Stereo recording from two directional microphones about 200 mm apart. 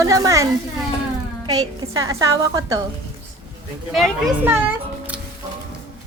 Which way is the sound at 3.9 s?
Centre (ahead or behind).